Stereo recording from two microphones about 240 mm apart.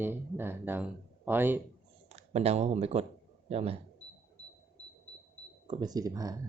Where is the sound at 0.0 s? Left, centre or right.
Centre.